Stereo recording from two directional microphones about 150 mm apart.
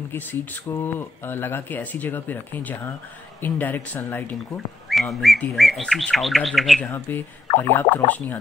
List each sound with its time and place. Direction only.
0.1 s speech: 15° left (ahead or behind)
4.8 s whistling: centre (ahead or behind)
5.4 s speech: centre (ahead or behind)
6.9 s speech: 15° left (ahead or behind)